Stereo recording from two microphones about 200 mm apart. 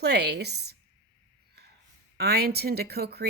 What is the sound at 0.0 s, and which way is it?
Speech, 55° right (ahead or behind).